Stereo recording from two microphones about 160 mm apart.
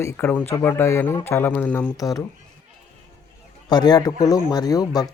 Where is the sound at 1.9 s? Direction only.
20° left (ahead or behind).